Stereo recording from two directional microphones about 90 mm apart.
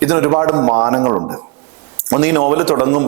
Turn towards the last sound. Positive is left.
turn(degrees=-15)  # may be behind; listen again after turning